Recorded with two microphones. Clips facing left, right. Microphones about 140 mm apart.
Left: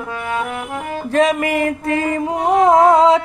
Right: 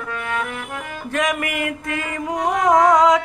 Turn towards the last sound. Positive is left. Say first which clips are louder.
# left 3 dB
turn(degrees=30)  # may be behind; listen again after turning